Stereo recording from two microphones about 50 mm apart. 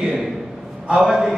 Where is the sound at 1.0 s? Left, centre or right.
Centre.